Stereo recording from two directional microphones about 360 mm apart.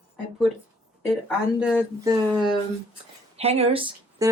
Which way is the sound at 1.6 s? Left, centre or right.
Centre.